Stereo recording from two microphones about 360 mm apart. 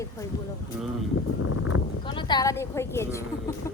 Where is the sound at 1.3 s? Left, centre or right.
Left.